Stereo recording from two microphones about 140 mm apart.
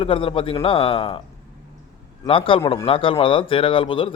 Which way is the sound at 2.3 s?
40° left (ahead or behind).